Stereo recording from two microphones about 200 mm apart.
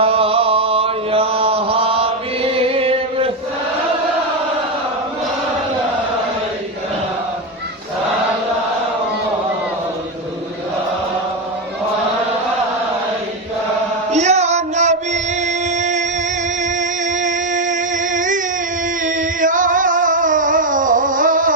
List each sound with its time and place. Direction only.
0.0 s chant: 30° right (ahead or behind)
14.1 s music: 35° right (ahead or behind)
17.1 s music: 40° right (ahead or behind)